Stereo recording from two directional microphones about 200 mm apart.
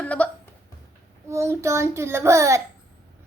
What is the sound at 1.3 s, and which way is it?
Speech, 15° right (ahead or behind).